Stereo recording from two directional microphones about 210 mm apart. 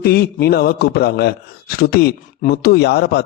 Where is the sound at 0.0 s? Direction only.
50° left (ahead or behind).